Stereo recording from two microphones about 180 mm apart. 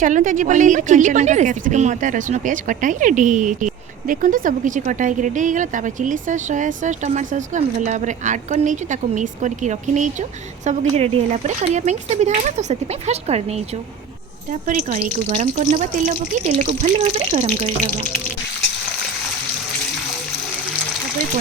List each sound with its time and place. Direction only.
0.0 s speech: 45° right (ahead or behind)
14.7 s speech: 45° right (ahead or behind)